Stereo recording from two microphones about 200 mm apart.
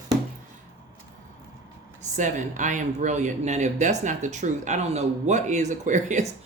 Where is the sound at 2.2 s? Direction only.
40° right (ahead or behind).